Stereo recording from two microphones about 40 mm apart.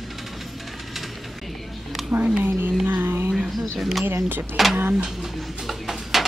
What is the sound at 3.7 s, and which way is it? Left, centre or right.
Speech, centre.